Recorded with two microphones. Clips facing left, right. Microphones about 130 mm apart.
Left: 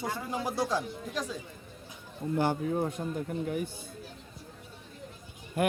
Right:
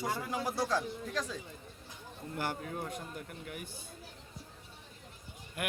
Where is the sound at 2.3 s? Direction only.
25° left (ahead or behind).